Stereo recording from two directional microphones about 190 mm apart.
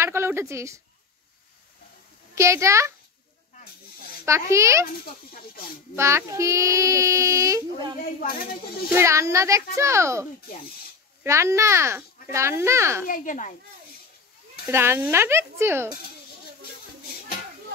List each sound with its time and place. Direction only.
0.0 s a woman's voice: 15° right (ahead or behind)
2.3 s a child's voice: 15° right (ahead or behind)
4.3 s a child's voice: 15° right (ahead or behind)
5.0 s speech: 50° left (ahead or behind)
5.9 s a child's voice: 15° right (ahead or behind)
8.2 s speech: 50° left (ahead or behind)
8.9 s a child's voice: 15° right (ahead or behind)
11.2 s a child's voice: 15° right (ahead or behind)
13.0 s speech: 45° left (ahead or behind)
14.7 s a child's voice: 15° right (ahead or behind)